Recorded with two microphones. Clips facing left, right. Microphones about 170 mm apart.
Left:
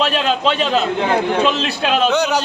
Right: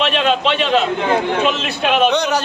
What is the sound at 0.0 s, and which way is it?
Speech, 40° left (ahead or behind).